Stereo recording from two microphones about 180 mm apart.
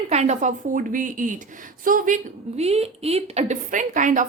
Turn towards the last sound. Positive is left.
turn(degrees=-45)  # may be behind; listen again after turning